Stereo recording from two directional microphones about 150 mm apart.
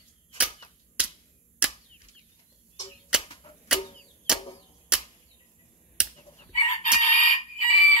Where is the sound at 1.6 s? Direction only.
5° right (ahead or behind).